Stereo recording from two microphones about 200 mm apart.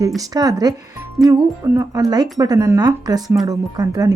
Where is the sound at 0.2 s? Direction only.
20° right (ahead or behind).